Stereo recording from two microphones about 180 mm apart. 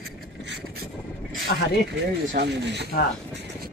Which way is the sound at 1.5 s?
60° left (ahead or behind).